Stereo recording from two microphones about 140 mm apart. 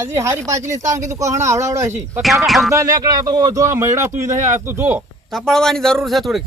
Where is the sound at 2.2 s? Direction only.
Centre (ahead or behind).